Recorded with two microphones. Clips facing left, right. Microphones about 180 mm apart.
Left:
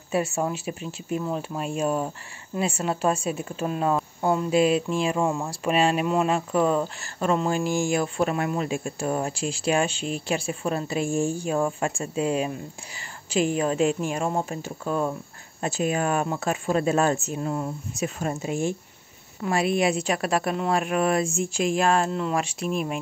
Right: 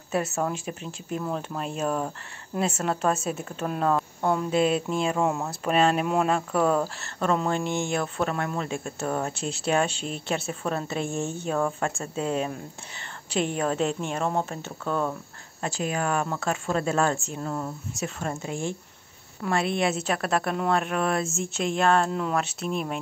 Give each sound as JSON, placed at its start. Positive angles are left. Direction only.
{"t": 0.1, "sound": "speech", "side_deg": 10}
{"t": 19.4, "sound": "speech", "side_deg": 5}